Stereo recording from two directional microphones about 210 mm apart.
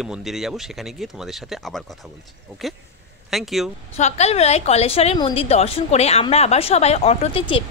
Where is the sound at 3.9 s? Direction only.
30° left (ahead or behind).